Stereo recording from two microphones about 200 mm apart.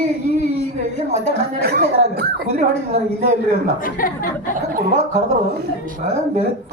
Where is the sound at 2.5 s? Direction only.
35° right (ahead or behind).